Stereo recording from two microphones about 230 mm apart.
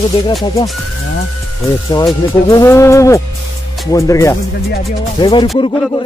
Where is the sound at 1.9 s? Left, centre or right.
Centre.